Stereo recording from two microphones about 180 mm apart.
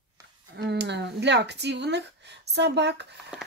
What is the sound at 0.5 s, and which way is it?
Speech, 65° right (ahead or behind).